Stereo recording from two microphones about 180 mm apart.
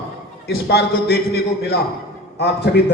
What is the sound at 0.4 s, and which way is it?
A man's voice, 65° left (ahead or behind).